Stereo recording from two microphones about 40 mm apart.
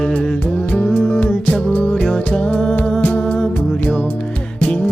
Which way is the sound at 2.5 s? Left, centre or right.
Centre.